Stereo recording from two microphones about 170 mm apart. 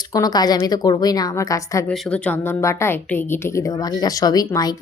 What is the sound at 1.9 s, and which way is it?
A woman's voice, 5° left (ahead or behind).